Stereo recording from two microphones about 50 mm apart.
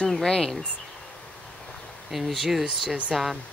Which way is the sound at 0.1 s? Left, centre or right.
Centre.